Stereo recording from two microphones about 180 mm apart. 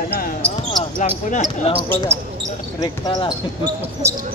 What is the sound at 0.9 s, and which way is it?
Speech, 45° left (ahead or behind).